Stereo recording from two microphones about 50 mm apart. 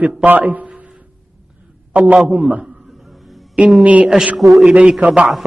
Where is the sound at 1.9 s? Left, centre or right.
Right.